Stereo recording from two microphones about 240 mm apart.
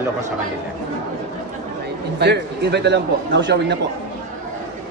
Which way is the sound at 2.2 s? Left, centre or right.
Right.